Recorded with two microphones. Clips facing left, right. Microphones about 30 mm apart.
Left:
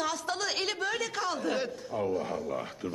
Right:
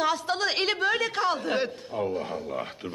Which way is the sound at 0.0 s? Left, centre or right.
Right.